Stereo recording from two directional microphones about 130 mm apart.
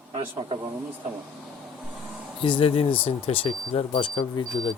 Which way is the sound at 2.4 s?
45° left (ahead or behind).